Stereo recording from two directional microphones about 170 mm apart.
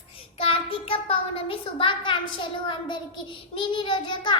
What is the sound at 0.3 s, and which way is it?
A child's voice, 35° left (ahead or behind).